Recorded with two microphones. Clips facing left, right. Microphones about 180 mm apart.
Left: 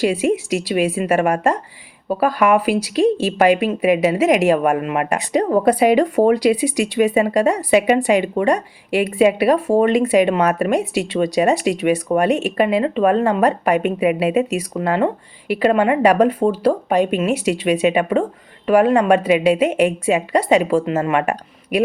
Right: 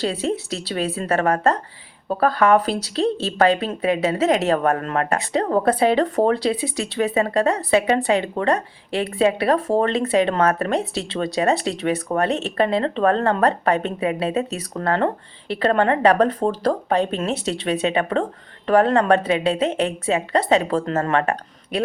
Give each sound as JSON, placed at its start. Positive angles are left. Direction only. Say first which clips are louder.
{"t": 0.0, "sound": "speech", "louder": "left 6 dB", "side_deg": 15}